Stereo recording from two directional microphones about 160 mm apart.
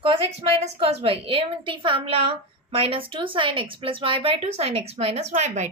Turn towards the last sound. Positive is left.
turn(degrees=-45)  # may be behind; listen again after turning